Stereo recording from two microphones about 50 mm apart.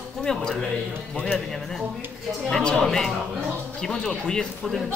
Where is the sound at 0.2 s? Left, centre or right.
Centre.